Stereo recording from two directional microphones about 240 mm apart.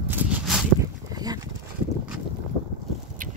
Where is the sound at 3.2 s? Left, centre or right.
Right.